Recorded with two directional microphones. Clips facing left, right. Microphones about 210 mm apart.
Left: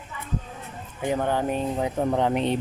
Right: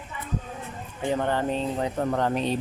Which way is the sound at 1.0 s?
10° left (ahead or behind).